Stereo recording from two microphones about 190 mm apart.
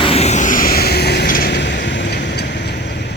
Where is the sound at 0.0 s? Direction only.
30° left (ahead or behind).